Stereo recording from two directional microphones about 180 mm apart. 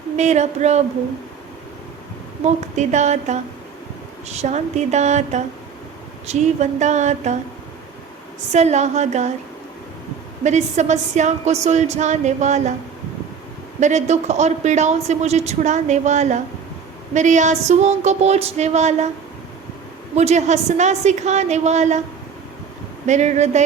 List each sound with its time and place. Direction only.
0.2 s a woman's voice: 40° right (ahead or behind)
2.4 s a woman's voice: 40° right (ahead or behind)
8.5 s a woman's voice: 40° right (ahead or behind)
10.4 s a woman's voice: 40° right (ahead or behind)
13.7 s a woman's voice: 40° right (ahead or behind)
20.1 s a woman's voice: 40° right (ahead or behind)
23.0 s a woman's voice: 40° right (ahead or behind)